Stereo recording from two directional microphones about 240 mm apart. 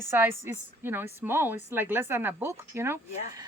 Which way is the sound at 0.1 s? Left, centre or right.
Centre.